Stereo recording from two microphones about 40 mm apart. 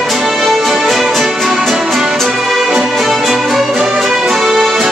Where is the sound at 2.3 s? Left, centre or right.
Centre.